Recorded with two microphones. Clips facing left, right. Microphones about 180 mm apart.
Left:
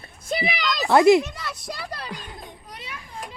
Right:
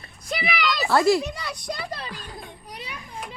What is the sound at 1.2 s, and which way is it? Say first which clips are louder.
Children playing: even; centre (ahead or behind).